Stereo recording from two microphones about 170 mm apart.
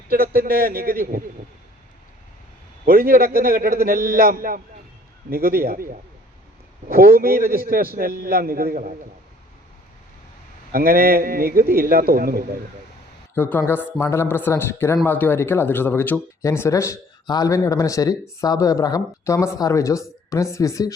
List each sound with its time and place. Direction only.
0.1 s a man's voice: 60° right (ahead or behind)
2.8 s a man's voice: 60° right (ahead or behind)
10.7 s a man's voice: 60° right (ahead or behind)
13.3 s speech: 15° left (ahead or behind)